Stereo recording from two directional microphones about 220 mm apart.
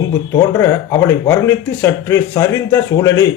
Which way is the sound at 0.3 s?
15° left (ahead or behind).